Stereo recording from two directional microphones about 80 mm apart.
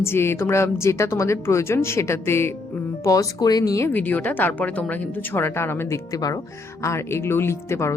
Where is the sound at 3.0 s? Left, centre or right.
Left.